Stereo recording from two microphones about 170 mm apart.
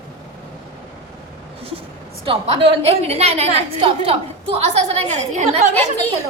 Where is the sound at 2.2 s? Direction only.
30° right (ahead or behind).